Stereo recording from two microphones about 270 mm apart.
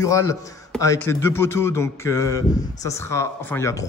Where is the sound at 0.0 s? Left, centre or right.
Centre.